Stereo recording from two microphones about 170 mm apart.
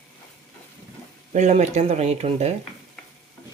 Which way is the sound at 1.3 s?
40° right (ahead or behind).